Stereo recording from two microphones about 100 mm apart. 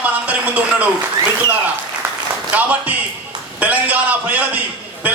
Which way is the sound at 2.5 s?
15° right (ahead or behind).